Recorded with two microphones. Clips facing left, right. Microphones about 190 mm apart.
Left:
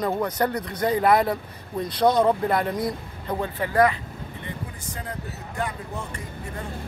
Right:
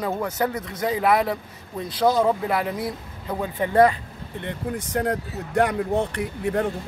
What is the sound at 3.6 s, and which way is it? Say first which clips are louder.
Speech: right 4 dB; 25° right (ahead or behind).